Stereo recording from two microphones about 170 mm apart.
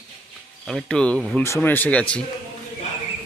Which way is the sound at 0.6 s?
5° left (ahead or behind).